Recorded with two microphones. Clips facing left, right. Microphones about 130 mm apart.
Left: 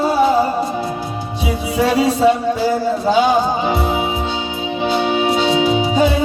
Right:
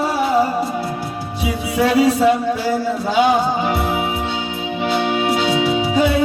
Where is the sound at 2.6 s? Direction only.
30° left (ahead or behind).